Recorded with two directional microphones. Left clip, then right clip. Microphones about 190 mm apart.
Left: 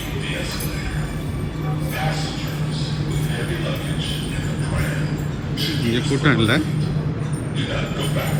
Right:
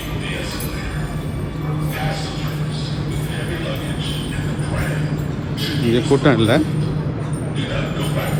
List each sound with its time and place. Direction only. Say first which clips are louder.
5.9 s speech: right 6 dB; 20° right (ahead or behind)